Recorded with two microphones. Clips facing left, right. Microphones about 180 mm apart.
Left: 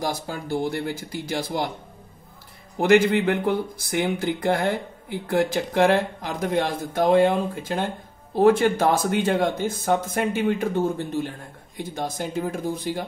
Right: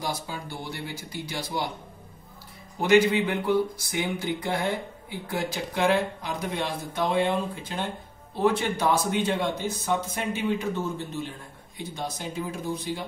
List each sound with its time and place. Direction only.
0.0 s speech: 50° left (ahead or behind)
2.8 s speech: 50° left (ahead or behind)